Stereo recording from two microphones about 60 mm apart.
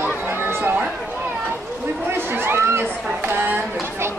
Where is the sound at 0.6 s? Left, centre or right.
Right.